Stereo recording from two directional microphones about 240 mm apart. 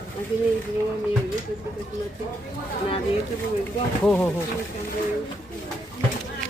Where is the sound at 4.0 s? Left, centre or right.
Centre.